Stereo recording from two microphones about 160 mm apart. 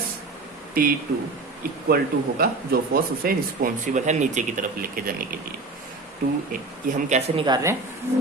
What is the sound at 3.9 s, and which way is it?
Speech, 50° right (ahead or behind).